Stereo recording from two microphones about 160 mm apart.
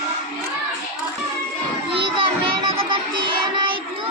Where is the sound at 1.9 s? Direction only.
35° right (ahead or behind).